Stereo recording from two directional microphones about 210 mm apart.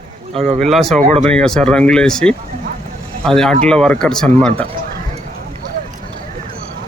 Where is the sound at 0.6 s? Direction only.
Centre (ahead or behind).